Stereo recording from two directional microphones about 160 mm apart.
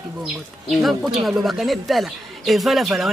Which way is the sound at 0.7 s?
Centre (ahead or behind).